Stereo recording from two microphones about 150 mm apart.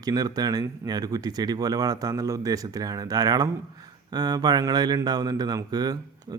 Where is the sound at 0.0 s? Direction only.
25° right (ahead or behind).